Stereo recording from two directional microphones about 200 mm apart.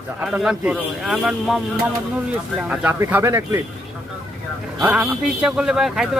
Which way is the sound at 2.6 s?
5° right (ahead or behind).